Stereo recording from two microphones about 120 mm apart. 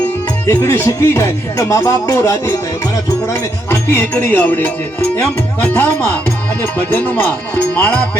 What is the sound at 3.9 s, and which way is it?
Speech, 15° left (ahead or behind).